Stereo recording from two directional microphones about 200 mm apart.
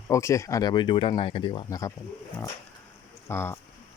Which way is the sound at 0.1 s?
15° left (ahead or behind).